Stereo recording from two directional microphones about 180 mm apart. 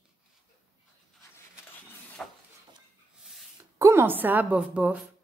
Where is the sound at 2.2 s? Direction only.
5° left (ahead or behind).